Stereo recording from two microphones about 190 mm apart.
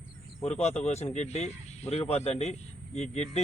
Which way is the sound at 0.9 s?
35° left (ahead or behind).